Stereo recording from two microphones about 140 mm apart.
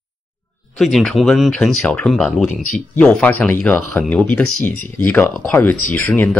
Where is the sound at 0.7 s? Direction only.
Centre (ahead or behind).